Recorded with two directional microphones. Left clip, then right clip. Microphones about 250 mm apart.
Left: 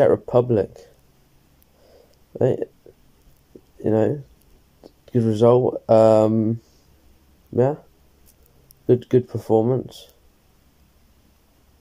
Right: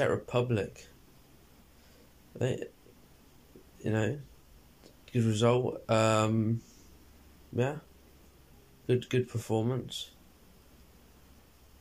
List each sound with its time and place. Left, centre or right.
0.0 s speech: left
2.3 s speech: left
3.8 s speech: left
8.8 s speech: left